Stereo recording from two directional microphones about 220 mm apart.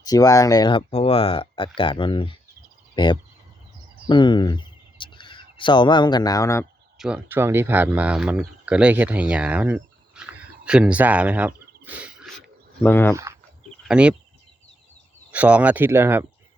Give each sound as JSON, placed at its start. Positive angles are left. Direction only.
{"t": 0.0, "sound": "speech", "side_deg": 15}
{"t": 7.0, "sound": "speech", "side_deg": -5}
{"t": 12.8, "sound": "speech", "side_deg": 10}
{"t": 13.8, "sound": "speech", "side_deg": -5}
{"t": 15.3, "sound": "speech", "side_deg": -5}